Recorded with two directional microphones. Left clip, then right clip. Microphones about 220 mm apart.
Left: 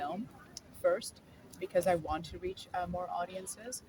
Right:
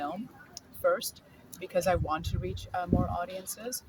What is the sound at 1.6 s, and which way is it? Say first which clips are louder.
Speech: right 2 dB; 5° right (ahead or behind).